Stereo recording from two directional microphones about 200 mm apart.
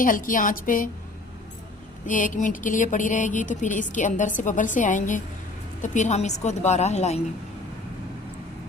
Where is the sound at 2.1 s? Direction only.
40° left (ahead or behind).